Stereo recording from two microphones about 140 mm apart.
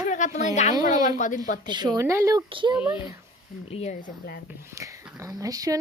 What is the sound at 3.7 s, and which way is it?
Speech, 50° left (ahead or behind).